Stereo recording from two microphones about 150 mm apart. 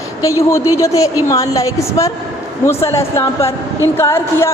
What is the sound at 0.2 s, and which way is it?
A woman's voice, 20° left (ahead or behind).